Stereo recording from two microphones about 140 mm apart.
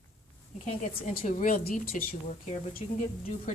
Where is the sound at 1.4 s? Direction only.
85° left.